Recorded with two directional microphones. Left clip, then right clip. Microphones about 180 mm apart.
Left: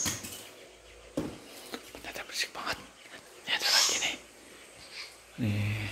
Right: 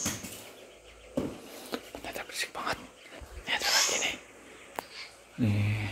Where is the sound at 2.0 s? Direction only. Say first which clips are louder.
Left 2 dB; 10° right (ahead or behind).